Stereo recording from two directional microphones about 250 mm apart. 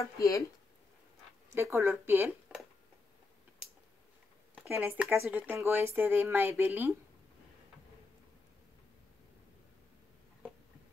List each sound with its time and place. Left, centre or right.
0.0 s speech: centre
1.5 s speech: centre
4.6 s speech: centre